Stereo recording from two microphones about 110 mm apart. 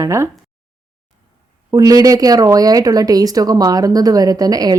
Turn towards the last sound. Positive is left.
turn(degrees=-35)  # may be behind; listen again after turning